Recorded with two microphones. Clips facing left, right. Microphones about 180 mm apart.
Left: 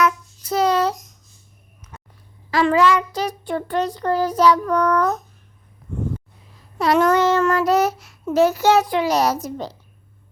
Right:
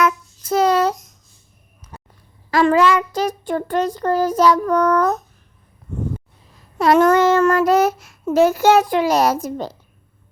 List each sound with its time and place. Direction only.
0.0 s child singing: 50° right (ahead or behind)
1.9 s a sound: 35° right (ahead or behind)
2.5 s speech: 45° right (ahead or behind)
6.7 s speech: 50° right (ahead or behind)